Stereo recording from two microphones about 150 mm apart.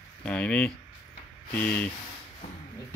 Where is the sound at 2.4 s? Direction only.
45° left (ahead or behind).